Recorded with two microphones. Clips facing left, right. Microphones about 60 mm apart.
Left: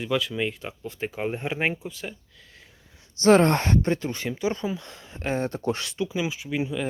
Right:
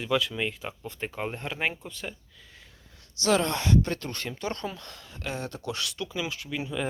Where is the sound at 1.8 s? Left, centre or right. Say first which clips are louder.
Left 3 dB; centre.